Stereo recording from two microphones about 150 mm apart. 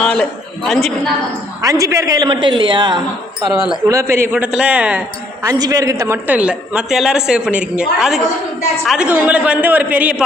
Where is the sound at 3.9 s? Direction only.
20° right (ahead or behind).